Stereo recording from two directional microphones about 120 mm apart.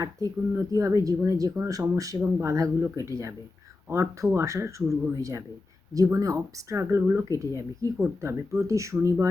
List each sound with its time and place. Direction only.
0.0 s speech: 30° right (ahead or behind)